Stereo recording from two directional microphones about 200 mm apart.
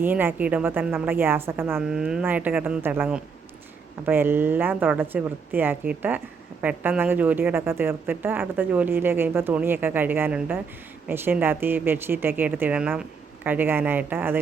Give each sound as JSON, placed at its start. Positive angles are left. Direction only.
{"t": 0.0, "sound": "speech", "side_deg": -10}